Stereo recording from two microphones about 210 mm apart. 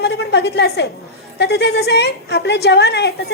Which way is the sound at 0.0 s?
50° left (ahead or behind).